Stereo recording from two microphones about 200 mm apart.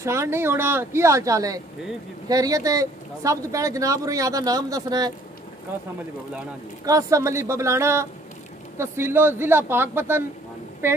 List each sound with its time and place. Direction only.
0.0 s speech: 15° right (ahead or behind)
6.8 s speech: 15° right (ahead or behind)